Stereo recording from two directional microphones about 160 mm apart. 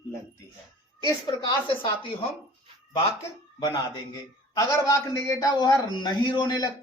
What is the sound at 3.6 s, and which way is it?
Speech, 30° left (ahead or behind).